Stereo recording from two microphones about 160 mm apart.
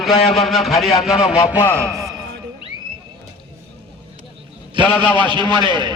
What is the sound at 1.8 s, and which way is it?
Speech, 20° right (ahead or behind).